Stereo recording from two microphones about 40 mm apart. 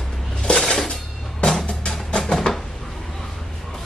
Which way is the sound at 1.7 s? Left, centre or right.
Left.